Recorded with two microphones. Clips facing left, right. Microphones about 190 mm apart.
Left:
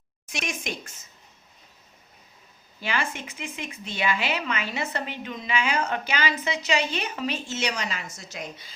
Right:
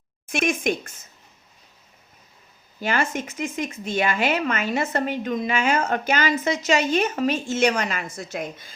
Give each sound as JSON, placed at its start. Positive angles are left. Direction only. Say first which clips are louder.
{"t": 0.3, "sound": "a woman's voice", "louder": "right 10 dB", "side_deg": -55}
{"t": 2.8, "sound": "a woman's voice", "louder": "right 5 dB", "side_deg": -45}